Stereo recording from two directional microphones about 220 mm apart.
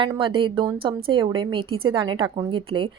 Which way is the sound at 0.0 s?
20° right (ahead or behind).